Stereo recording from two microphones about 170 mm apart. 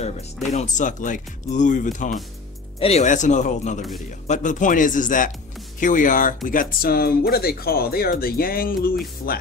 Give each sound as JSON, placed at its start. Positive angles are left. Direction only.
{"t": 0.5, "sound": "speech", "side_deg": 45}